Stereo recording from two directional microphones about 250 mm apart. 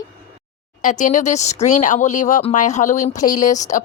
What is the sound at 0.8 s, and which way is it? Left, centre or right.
Speech, left.